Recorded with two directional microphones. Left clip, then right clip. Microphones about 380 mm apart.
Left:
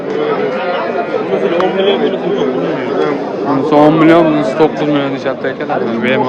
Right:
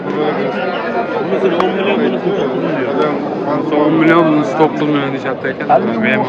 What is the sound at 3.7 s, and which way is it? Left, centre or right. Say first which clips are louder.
A man's voice: left 4 dB; centre.